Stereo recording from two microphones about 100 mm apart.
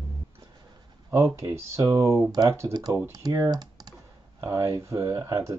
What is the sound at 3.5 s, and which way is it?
Computer keyboard, 40° right (ahead or behind).